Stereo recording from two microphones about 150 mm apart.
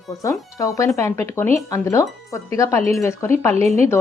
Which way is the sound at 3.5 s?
45° right (ahead or behind).